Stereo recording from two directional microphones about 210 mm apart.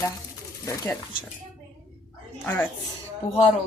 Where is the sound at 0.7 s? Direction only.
15° left (ahead or behind).